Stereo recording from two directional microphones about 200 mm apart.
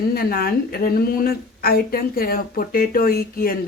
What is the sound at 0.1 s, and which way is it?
A woman's voice, 50° left (ahead or behind).